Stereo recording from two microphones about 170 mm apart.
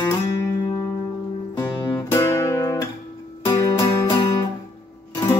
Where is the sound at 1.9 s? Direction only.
15° left (ahead or behind).